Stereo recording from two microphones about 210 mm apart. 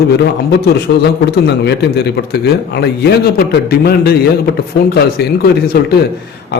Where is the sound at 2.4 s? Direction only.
50° left (ahead or behind).